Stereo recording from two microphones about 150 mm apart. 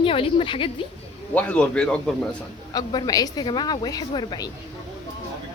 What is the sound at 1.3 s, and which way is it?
Speech, 10° left (ahead or behind).